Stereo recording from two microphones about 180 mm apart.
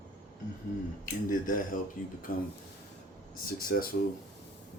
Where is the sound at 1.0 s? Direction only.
50° left (ahead or behind).